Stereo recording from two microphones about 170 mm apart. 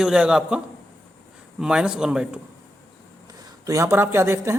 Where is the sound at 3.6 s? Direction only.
20° right (ahead or behind).